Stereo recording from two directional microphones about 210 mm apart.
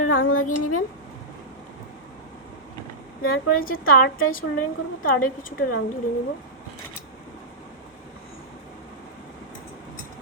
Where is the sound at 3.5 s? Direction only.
45° left (ahead or behind).